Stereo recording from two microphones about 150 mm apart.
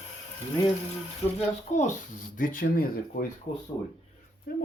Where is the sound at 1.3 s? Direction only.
55° left (ahead or behind); by 3.2 s 80° left.